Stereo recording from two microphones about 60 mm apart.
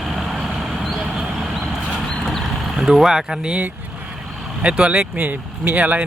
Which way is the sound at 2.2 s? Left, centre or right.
Centre.